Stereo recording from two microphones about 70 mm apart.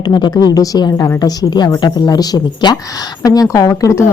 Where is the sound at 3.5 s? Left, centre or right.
Left.